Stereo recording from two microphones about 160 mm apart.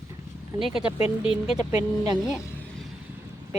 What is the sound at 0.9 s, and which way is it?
Speech, 35° left (ahead or behind).